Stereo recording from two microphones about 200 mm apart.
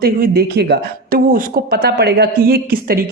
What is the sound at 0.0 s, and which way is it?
Speech, 50° right (ahead or behind).